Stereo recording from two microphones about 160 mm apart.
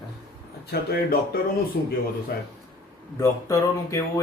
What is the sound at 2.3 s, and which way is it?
Speech, 70° left (ahead or behind).